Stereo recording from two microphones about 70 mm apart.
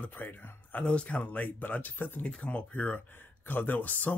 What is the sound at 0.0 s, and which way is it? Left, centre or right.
Speech, left.